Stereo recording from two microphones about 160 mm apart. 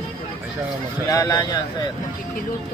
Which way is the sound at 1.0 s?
20° left (ahead or behind).